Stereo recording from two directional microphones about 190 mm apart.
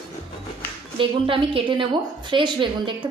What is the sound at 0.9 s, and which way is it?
A woman's voice, 25° right (ahead or behind).